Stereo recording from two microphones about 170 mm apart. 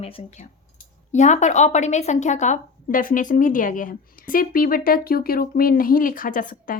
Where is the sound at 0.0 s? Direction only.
35° left (ahead or behind).